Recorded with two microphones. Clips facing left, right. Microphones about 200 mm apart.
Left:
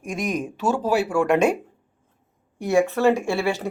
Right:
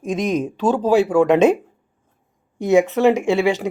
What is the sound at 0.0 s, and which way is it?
Speech, 20° right (ahead or behind).